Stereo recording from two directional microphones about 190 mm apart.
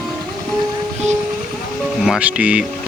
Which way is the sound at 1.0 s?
35° right (ahead or behind).